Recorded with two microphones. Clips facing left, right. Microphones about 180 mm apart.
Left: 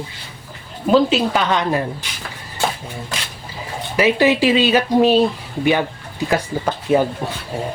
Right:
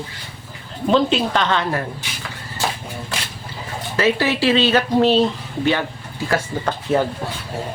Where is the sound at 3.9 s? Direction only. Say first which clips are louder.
Left 4 dB; 15° left (ahead or behind).